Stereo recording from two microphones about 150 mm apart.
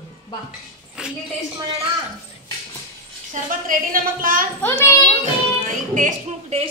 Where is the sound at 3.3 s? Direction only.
65° right (ahead or behind).